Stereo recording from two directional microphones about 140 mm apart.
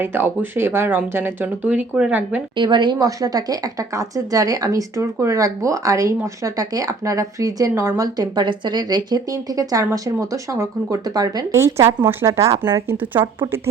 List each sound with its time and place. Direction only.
0.0 s speech: 15° right (ahead or behind)
2.6 s a woman's voice: 35° right (ahead or behind)